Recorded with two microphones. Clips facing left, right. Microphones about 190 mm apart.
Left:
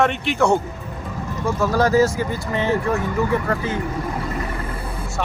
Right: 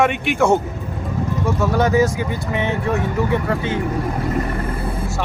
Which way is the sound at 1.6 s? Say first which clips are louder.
Even; centre (ahead or behind).